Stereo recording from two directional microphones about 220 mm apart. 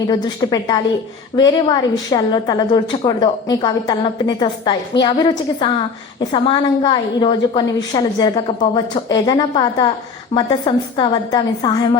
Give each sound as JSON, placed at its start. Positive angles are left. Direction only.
{"t": 0.1, "sound": "a woman's voice", "side_deg": 20}